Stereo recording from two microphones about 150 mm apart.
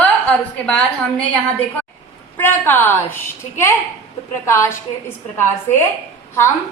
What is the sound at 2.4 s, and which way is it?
Speech, 15° left (ahead or behind).